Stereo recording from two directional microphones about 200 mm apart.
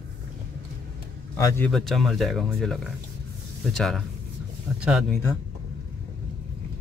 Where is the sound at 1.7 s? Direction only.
Centre (ahead or behind).